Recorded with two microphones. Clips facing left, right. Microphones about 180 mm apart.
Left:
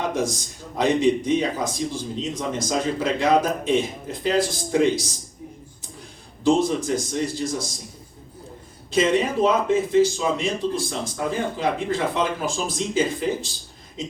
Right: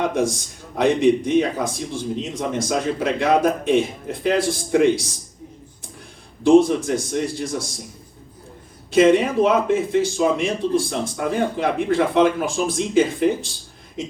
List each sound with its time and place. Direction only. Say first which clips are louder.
0.1 s speech: right 3 dB; 60° right (ahead or behind)
6.4 s speech: right 6 dB; 60° right (ahead or behind)
8.9 s speech: right 5 dB; 60° right (ahead or behind)